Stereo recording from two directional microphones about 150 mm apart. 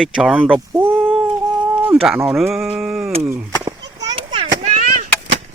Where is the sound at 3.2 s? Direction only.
15° right (ahead or behind).